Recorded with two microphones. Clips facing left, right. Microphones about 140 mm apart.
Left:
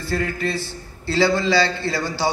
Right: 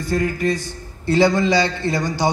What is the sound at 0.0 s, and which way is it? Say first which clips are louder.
A man's voice: right 4 dB; 15° right (ahead or behind).